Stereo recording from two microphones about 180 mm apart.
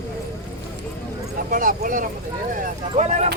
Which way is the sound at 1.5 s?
50° right (ahead or behind).